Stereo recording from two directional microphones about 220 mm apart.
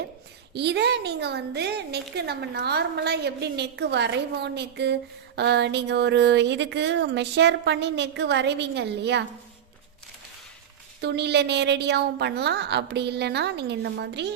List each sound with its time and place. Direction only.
0.5 s a woman's voice: 50° right (ahead or behind)
11.0 s a woman's voice: 50° right (ahead or behind)